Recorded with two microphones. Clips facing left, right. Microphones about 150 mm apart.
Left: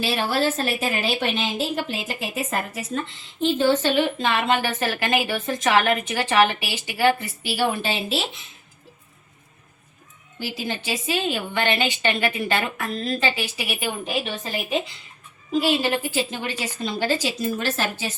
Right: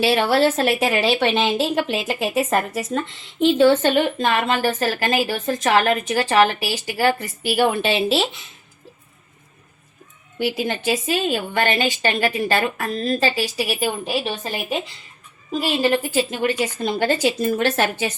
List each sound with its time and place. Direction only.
0.0 s a woman's voice: 70° right (ahead or behind); by 3.0 s 90° right
3.4 s a woman's voice: 70° right (ahead or behind); by 8.4 s 85° right
10.3 s a woman's voice: 60° right (ahead or behind); by 13.9 s 40° right (ahead or behind)
15.6 s a woman's voice: 45° right (ahead or behind); by 18.1 s 60° right (ahead or behind)